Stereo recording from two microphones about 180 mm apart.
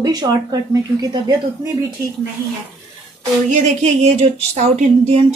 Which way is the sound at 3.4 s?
40° right (ahead or behind).